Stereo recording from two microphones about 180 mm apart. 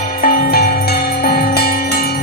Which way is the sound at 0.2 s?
55° left (ahead or behind).